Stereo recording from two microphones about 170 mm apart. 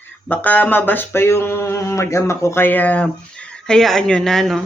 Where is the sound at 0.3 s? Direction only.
10° left (ahead or behind).